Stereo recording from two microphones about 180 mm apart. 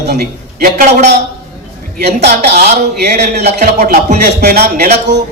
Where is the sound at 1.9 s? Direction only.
65° right (ahead or behind).